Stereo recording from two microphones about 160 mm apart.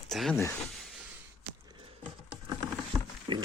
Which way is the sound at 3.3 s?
30° right (ahead or behind).